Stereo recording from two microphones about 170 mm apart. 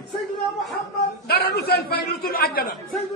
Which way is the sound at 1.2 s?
65° left (ahead or behind).